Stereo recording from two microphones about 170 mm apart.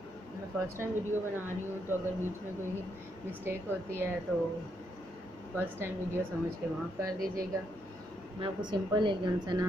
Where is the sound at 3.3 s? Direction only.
15° right (ahead or behind).